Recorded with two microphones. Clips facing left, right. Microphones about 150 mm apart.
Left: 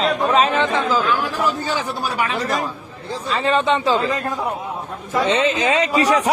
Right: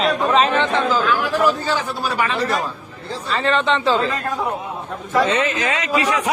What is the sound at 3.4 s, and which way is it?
Speech, 10° left (ahead or behind).